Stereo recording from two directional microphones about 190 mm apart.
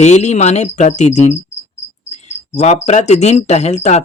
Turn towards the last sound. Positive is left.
turn(degrees=35)  # may be behind; listen again after turning